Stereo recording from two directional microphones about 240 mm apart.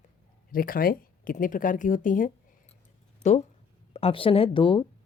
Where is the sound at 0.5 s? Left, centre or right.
Left.